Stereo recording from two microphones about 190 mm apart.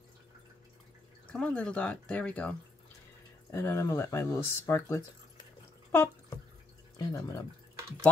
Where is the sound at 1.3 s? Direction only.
5° left (ahead or behind).